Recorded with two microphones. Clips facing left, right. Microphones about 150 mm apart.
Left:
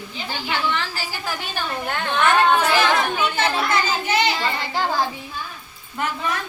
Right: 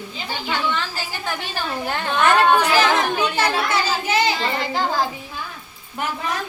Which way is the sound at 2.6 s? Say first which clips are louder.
Right 1 dB; 15° right (ahead or behind).